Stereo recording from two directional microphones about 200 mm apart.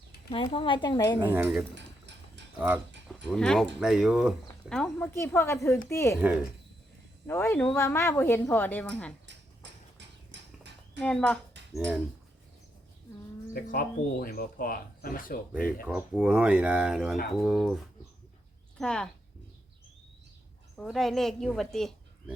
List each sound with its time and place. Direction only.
0.3 s a woman's voice: 25° left (ahead or behind)
1.3 s speech: 10° right (ahead or behind)
1.7 s a sound: 65° right (ahead or behind)
2.6 s speech: 5° right (ahead or behind); by 6.1 s 15° left (ahead or behind)
7.3 s speech: 10° left (ahead or behind)
9.2 s a sound: 60° right (ahead or behind)
11.0 s speech: 5° left (ahead or behind)
13.5 s speech: 45° left (ahead or behind)
15.5 s speech: 5° right (ahead or behind)
18.8 s speech: 5° left (ahead or behind)
20.7 s a woman's voice: centre (ahead or behind)